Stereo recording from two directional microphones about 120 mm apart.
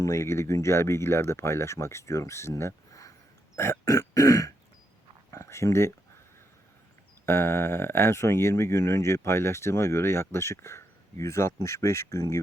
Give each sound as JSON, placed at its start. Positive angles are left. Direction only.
{"t": 0.0, "sound": "speech", "side_deg": 25}
{"t": 3.5, "sound": "grunt", "side_deg": 25}
{"t": 5.3, "sound": "speech", "side_deg": 25}
{"t": 7.3, "sound": "speech", "side_deg": 20}